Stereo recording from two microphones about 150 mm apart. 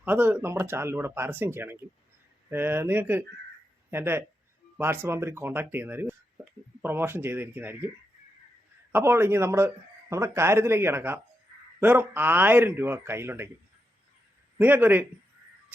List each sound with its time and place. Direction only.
0.0 s speech: 15° right (ahead or behind)
8.9 s speech: 15° right (ahead or behind)
14.6 s speech: 10° right (ahead or behind)